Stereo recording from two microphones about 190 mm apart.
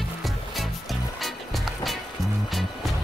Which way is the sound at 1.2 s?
Centre (ahead or behind).